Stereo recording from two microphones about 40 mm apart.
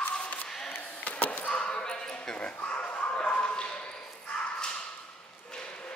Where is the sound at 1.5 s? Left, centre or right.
Left.